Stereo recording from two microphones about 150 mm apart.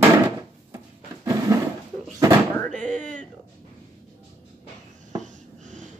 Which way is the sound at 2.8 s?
60° right (ahead or behind).